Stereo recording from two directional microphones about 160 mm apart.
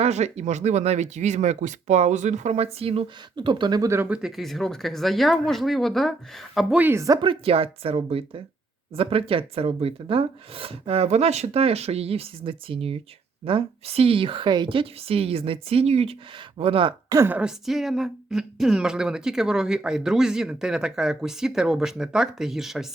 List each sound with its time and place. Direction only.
0.0 s speech: 45° right (ahead or behind)
17.2 s a woman's voice: 10° right (ahead or behind)